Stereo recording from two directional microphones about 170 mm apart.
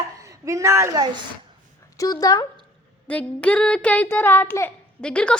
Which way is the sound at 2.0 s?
20° left (ahead or behind).